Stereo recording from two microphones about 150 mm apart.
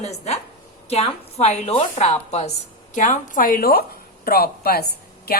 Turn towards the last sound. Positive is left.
turn(degrees=90)